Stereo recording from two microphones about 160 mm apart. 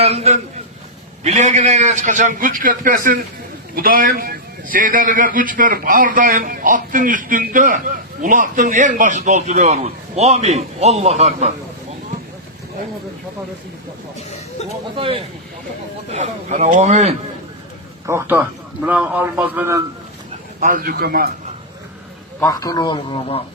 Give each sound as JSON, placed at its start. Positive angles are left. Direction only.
{"t": 0.0, "sound": "a man's voice", "side_deg": -40}
{"t": 14.9, "sound": "speech", "side_deg": -35}
{"t": 16.1, "sound": "a man's voice", "side_deg": -45}
{"t": 18.0, "sound": "a man's voice", "side_deg": -15}
{"t": 20.6, "sound": "a man's voice", "side_deg": -60}
{"t": 22.4, "sound": "a man's voice", "side_deg": 20}